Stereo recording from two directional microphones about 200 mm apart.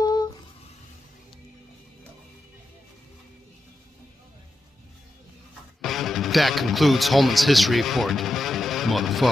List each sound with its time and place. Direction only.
5.8 s speech: centre (ahead or behind)